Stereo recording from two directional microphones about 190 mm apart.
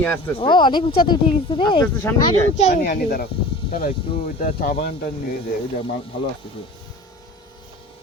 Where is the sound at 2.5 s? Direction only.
40° left (ahead or behind).